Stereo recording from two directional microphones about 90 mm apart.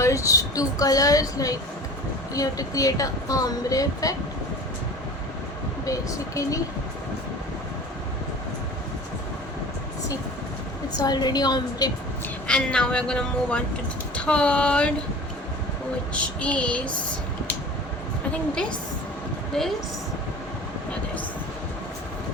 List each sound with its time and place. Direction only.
0.0 s a woman's voice: 35° left (ahead or behind)
5.8 s a woman's voice: 40° left (ahead or behind)
10.9 s a woman's voice: 50° left (ahead or behind)
12.5 s speech: 10° left (ahead or behind)
16.1 s speech: 15° left (ahead or behind)
19.5 s a woman's voice: 5° left (ahead or behind)